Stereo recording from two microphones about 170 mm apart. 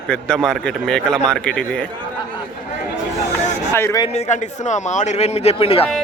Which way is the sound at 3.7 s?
15° left (ahead or behind).